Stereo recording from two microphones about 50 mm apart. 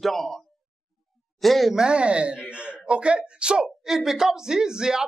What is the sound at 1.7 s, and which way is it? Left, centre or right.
Speech, centre.